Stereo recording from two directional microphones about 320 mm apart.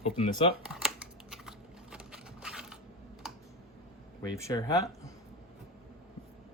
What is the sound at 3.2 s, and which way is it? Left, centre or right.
Typing, centre.